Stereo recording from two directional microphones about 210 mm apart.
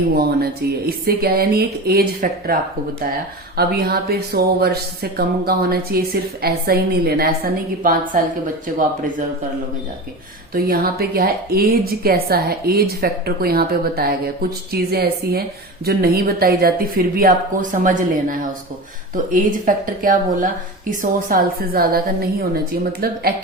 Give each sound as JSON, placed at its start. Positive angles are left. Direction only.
{"t": 0.9, "sound": "a woman's voice", "side_deg": -45}
{"t": 3.6, "sound": "a woman's voice", "side_deg": -45}
{"t": 10.5, "sound": "a woman's voice", "side_deg": -45}